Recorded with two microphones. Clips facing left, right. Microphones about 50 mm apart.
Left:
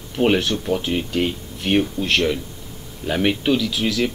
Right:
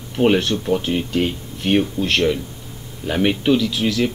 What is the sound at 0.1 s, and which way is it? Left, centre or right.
Speech, centre.